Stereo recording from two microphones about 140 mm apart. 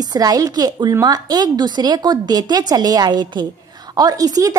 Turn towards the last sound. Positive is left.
turn(degrees=-25)  # may be behind; listen again after turning